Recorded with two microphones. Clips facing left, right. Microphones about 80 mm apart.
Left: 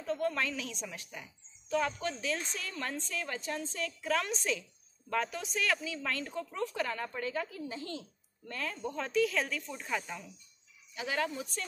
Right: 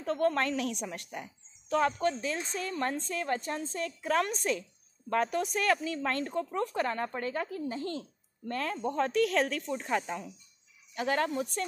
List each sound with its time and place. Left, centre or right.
0.0 s speech: right
9.1 s speech: right
9.8 s speech: right
11.0 s speech: right